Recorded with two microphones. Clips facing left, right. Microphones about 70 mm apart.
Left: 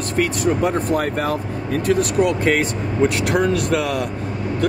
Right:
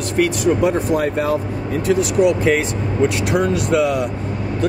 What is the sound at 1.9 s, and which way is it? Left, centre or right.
Speech, left.